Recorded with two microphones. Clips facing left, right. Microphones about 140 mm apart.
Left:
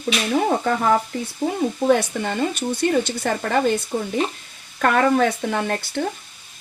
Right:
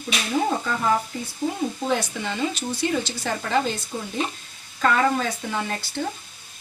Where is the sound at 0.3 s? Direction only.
55° left (ahead or behind).